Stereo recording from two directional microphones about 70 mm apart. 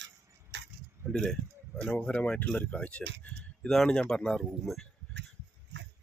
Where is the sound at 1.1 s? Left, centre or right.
Centre.